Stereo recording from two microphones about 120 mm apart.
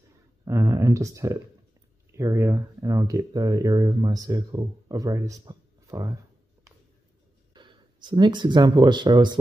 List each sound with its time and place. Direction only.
0.5 s speech: 25° right (ahead or behind)
7.5 s speech: 40° right (ahead or behind)